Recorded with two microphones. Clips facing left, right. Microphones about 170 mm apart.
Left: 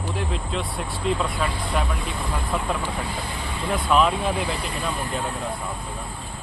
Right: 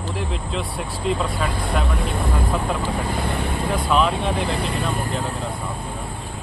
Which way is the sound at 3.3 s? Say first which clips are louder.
Right 7 dB; 60° right (ahead or behind).